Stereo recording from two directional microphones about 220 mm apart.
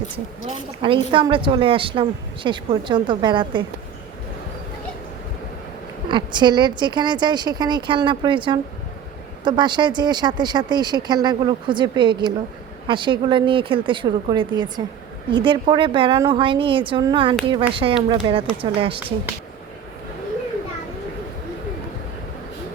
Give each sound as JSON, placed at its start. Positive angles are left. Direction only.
{"t": 0.8, "sound": "a woman's voice", "side_deg": -25}
{"t": 6.1, "sound": "a woman's voice", "side_deg": -20}